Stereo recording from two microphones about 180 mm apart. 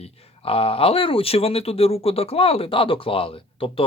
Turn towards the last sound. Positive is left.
turn(degrees=30)  # may be behind; listen again after turning